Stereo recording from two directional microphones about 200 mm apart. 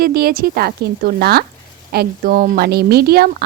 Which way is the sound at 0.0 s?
50° right (ahead or behind).